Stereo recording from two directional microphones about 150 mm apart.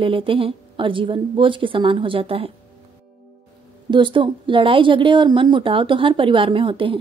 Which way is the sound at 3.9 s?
35° right (ahead or behind).